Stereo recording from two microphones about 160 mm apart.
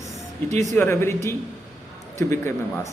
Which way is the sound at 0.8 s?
15° left (ahead or behind).